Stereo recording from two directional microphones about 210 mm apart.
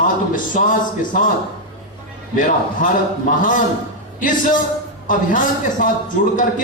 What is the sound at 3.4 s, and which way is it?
A man's voice, 40° left (ahead or behind).